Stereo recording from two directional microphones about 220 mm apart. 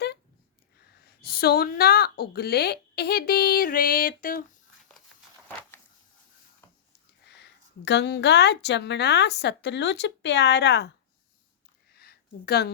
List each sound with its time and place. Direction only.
1.2 s speech: 45° left (ahead or behind)
7.9 s speech: 50° left (ahead or behind)
11.9 s a sound: 45° left (ahead or behind)